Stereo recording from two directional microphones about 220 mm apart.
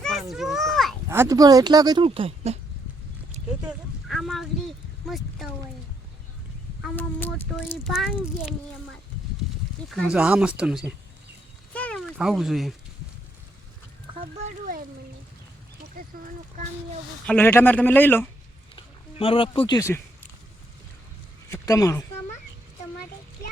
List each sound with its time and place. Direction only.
0.0 s a sound: centre (ahead or behind)
1.0 s speech: 10° right (ahead or behind); by 2.6 s 25° right (ahead or behind)
3.7 s speech: centre (ahead or behind)
6.8 s a man's voice: 10° left (ahead or behind)
9.9 s speech: centre (ahead or behind)
11.7 s a sound: 5° left (ahead or behind)
14.2 s speech: 35° right (ahead or behind)
16.0 s speech: 35° right (ahead or behind)
17.2 s a man's voice: 10° left (ahead or behind)
18.8 s speech: 25° left (ahead or behind)
21.5 s speech: 15° left (ahead or behind)